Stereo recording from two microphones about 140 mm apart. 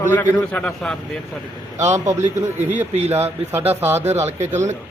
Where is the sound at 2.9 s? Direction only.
50° right (ahead or behind).